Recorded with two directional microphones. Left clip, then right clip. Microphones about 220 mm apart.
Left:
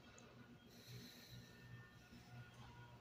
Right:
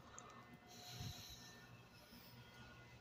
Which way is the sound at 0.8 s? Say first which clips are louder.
Right 6 dB; 25° left (ahead or behind).